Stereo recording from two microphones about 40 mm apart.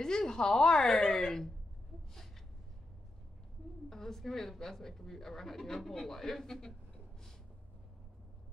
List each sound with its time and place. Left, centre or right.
0.0 s speech: centre
3.9 s speech: centre